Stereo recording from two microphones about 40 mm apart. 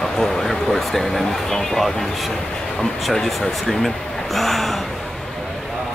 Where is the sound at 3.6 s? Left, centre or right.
Centre.